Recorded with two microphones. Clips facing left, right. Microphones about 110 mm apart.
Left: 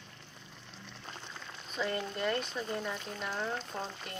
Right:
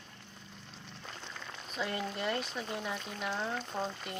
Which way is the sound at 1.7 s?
5° right (ahead or behind).